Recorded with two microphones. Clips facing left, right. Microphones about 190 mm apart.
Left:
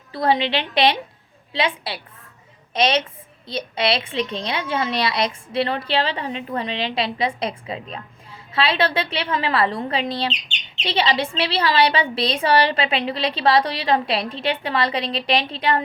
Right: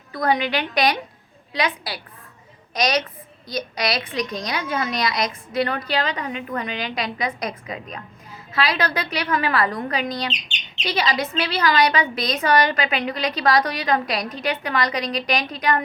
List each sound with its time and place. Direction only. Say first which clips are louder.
0.1 s a woman's voice: left 1 dB; 30° left (ahead or behind)